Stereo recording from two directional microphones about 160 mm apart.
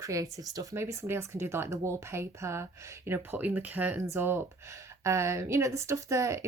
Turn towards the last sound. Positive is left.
turn(degrees=-20)  # may be behind; listen again after turning